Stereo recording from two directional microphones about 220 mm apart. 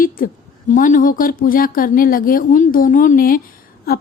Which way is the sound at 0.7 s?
35° left (ahead or behind).